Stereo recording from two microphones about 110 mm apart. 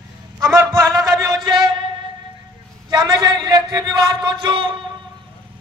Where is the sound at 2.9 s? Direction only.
35° right (ahead or behind).